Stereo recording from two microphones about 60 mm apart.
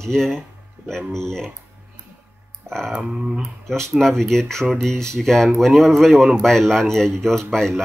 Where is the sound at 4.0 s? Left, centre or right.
Centre.